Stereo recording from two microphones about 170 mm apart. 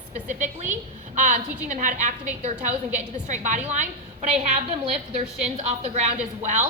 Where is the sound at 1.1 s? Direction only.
50° right (ahead or behind).